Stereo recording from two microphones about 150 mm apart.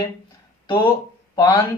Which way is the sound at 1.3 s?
25° left (ahead or behind).